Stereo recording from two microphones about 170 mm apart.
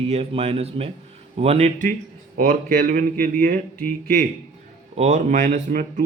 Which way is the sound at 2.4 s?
55° right (ahead or behind).